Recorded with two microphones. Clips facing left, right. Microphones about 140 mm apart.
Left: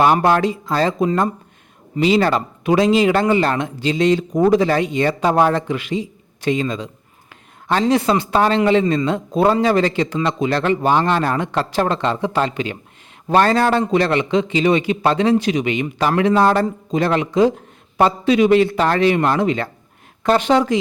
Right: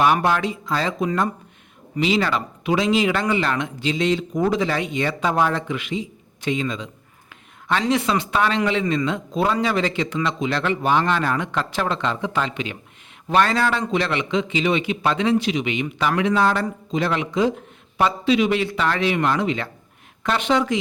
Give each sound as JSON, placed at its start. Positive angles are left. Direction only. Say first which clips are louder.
{"t": 0.0, "sound": "speech", "louder": "left 4 dB", "side_deg": 40}